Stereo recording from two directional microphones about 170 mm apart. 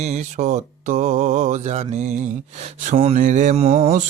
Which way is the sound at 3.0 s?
45° right (ahead or behind).